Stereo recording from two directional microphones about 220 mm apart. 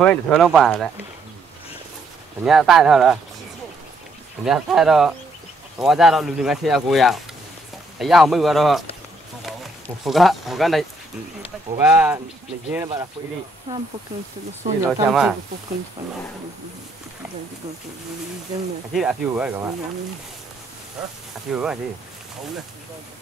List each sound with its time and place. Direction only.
0.0 s speech: centre (ahead or behind)
2.4 s speech: centre (ahead or behind)
4.5 s speech: 5° right (ahead or behind)
12.7 s speech: 20° right (ahead or behind)
14.9 s speech: centre (ahead or behind)
18.9 s speech: 5° right (ahead or behind)
21.5 s speech: 5° right (ahead or behind)